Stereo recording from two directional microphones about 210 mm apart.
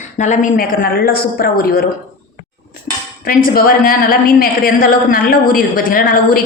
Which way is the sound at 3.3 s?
45° left (ahead or behind).